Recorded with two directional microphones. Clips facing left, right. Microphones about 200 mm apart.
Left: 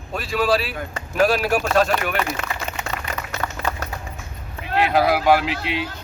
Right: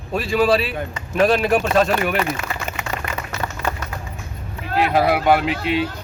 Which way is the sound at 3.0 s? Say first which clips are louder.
Right 2 dB; 55° right (ahead or behind).